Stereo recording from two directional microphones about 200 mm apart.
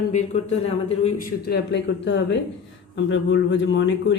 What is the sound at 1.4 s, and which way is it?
Speech, 55° left (ahead or behind).